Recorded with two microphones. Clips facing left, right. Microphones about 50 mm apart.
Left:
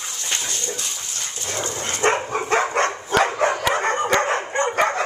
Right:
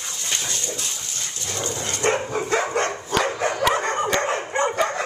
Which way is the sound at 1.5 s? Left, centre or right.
Left.